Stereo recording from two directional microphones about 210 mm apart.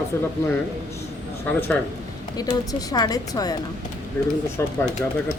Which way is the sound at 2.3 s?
20° left (ahead or behind).